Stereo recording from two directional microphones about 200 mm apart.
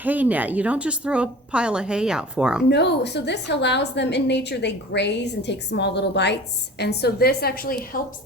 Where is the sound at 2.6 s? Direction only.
60° left (ahead or behind).